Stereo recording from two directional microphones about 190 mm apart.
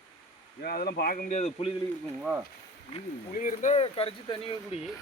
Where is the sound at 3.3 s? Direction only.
45° left (ahead or behind).